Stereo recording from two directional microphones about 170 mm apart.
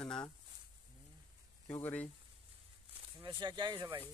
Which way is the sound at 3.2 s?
25° right (ahead or behind).